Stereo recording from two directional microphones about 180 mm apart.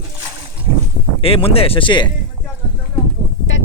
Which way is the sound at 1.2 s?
30° left (ahead or behind).